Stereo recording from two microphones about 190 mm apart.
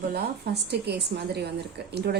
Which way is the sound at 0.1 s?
60° right (ahead or behind).